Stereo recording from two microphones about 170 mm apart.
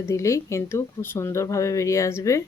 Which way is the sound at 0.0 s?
15° left (ahead or behind).